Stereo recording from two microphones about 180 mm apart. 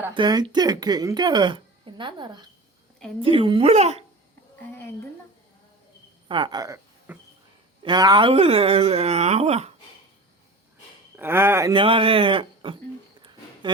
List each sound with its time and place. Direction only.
0.1 s a woman's voice: 25° right (ahead or behind)
6.2 s a woman's voice: 25° right (ahead or behind)
7.1 s cricket: 10° right (ahead or behind)
7.8 s speech: 25° right (ahead or behind)
11.2 s speech: 10° right (ahead or behind)
11.7 s a woman's voice: 30° right (ahead or behind)
13.2 s a sound: 25° right (ahead or behind)